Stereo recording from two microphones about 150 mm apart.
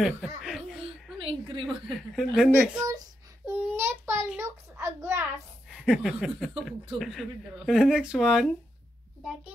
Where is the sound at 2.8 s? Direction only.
20° right (ahead or behind).